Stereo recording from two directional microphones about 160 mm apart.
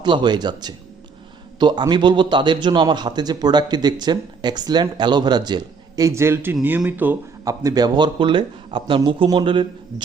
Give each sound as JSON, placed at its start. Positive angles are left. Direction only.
{"t": 0.0, "sound": "a man's voice", "side_deg": -30}
{"t": 7.4, "sound": "a man's voice", "side_deg": -25}